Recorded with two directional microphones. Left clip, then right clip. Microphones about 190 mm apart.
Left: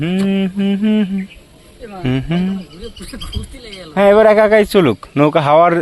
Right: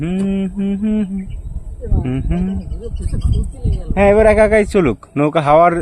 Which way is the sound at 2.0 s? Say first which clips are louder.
Left 4 dB; 5° left (ahead or behind).